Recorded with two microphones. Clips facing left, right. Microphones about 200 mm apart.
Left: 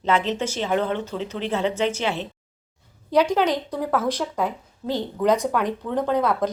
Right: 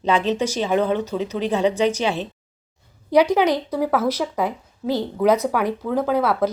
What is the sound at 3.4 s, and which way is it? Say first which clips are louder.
A woman's voice: right 3 dB; 10° right (ahead or behind).